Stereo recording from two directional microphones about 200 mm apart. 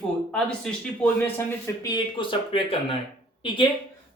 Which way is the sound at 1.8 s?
20° left (ahead or behind).